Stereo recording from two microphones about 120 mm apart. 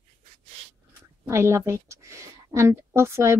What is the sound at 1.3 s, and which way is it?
A woman's voice, 25° right (ahead or behind).